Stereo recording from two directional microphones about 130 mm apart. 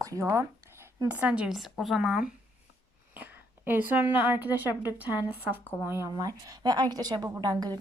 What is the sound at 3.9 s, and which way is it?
A woman's voice, 15° right (ahead or behind).